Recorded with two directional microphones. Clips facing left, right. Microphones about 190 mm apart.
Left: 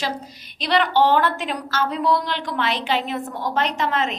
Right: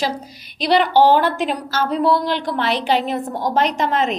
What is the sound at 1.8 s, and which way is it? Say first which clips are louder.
A woman's voice: right 4 dB; 40° right (ahead or behind).